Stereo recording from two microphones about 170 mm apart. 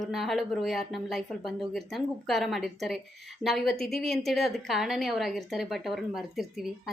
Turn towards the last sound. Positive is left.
turn(degrees=0)  # may be behind; listen again after turning